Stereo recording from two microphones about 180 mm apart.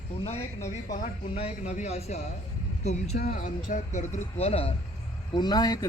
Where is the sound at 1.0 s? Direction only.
35° left (ahead or behind).